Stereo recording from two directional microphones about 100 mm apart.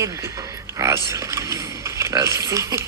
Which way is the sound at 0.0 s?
30° right (ahead or behind).